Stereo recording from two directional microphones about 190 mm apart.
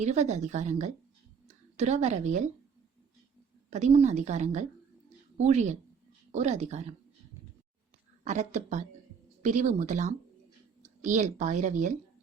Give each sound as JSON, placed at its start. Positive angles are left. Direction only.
{"t": 0.0, "sound": "a woman's voice", "side_deg": -35}
{"t": 3.7, "sound": "speech", "side_deg": -35}
{"t": 8.2, "sound": "speech", "side_deg": -35}